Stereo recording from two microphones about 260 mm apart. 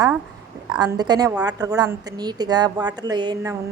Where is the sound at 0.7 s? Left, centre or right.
Centre.